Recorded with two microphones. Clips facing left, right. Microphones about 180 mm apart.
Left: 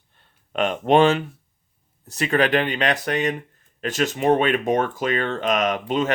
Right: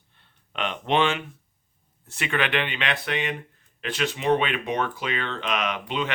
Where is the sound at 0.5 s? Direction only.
45° left (ahead or behind).